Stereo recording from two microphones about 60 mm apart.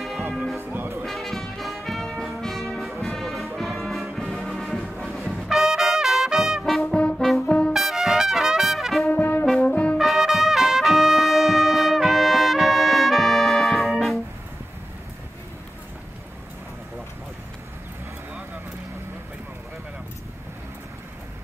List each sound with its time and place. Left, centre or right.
0.3 s music: centre
0.6 s music: right
1.0 s music: centre
4.2 s brass instrument: centre
6.9 s brass instrument: centre
7.2 s brass instrument: centre
7.4 s brass instrument: centre
7.7 s trumpet: centre
9.1 s brass instrument: left
9.9 s music: centre